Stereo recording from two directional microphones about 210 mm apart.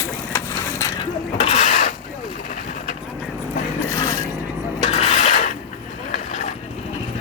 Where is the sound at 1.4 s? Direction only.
30° left (ahead or behind).